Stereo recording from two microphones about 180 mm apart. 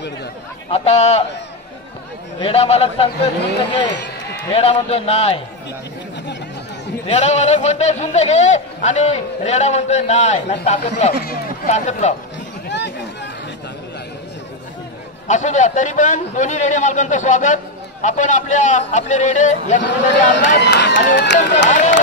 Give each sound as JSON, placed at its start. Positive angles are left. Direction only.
{"t": 0.7, "sound": "a man's voice", "side_deg": 35}
{"t": 2.4, "sound": "a man's voice", "side_deg": 35}
{"t": 4.5, "sound": "a man's voice", "side_deg": 30}
{"t": 7.1, "sound": "a man's voice", "side_deg": 40}
{"t": 11.1, "sound": "speech", "side_deg": 55}
{"t": 11.7, "sound": "a man's voice", "side_deg": 40}
{"t": 12.6, "sound": "a sound", "side_deg": 75}
{"t": 15.2, "sound": "a man's voice", "side_deg": 40}
{"t": 19.8, "sound": "speech", "side_deg": 80}
{"t": 21.6, "sound": "a man's voice", "side_deg": 40}